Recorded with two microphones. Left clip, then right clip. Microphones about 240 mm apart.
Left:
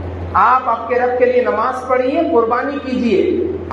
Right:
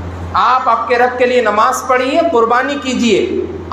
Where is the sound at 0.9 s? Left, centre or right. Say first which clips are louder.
Left 1 dB; right.